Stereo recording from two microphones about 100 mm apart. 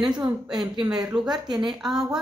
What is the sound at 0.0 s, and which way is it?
Speech, 5° right (ahead or behind).